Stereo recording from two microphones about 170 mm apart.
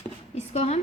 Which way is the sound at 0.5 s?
40° left (ahead or behind).